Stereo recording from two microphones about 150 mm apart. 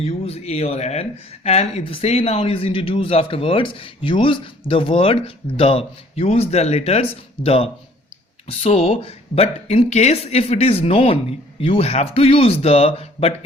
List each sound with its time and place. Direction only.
0.0 s speech: 45° left (ahead or behind)